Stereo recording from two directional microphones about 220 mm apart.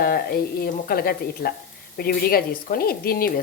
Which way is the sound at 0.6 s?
45° left (ahead or behind).